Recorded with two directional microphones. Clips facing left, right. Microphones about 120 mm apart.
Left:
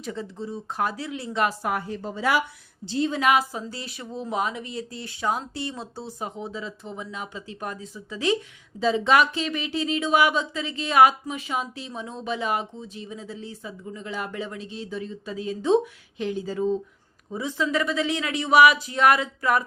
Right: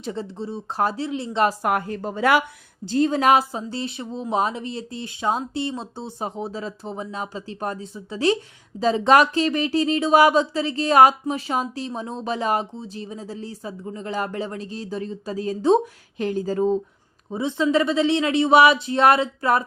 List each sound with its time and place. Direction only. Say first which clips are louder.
0.0 s a woman's voice: right 3 dB; 30° right (ahead or behind)
1.6 s a woman's voice: right 5 dB; 60° right (ahead or behind)
2.8 s speech: right 4 dB; 45° right (ahead or behind)
17.3 s a woman's voice: right 5 dB; 25° right (ahead or behind)